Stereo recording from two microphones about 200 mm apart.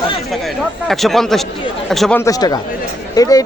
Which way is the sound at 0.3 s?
Centre (ahead or behind).